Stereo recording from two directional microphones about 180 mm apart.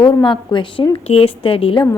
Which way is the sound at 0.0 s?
25° left (ahead or behind).